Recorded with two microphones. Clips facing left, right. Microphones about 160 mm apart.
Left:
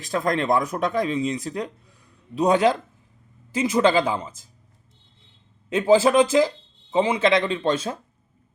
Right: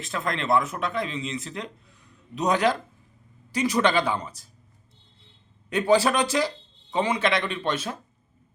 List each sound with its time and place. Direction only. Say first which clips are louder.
0.0 s speech: left 6 dB; 35° left (ahead or behind)
5.6 s speech: left 4 dB; 20° left (ahead or behind)